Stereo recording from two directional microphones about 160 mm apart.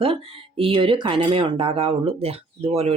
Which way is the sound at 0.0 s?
35° right (ahead or behind).